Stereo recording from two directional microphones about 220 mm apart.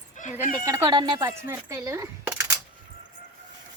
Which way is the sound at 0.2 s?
35° left (ahead or behind).